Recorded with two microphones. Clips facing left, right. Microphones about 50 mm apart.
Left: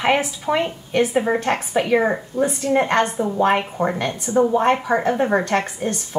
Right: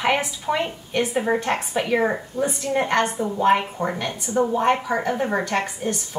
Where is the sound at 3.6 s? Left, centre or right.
Centre.